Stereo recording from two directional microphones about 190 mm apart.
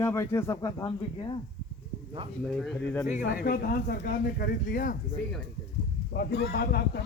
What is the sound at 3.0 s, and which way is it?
Speech, 40° left (ahead or behind).